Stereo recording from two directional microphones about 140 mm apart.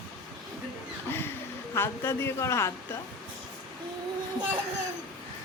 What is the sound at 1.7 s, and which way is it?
Speech, 15° left (ahead or behind).